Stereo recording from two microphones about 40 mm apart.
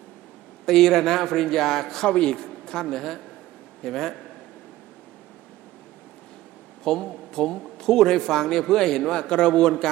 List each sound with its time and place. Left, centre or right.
0.6 s a man's voice: centre
2.0 s speech: left
2.8 s a man's voice: centre
6.8 s a man's voice: centre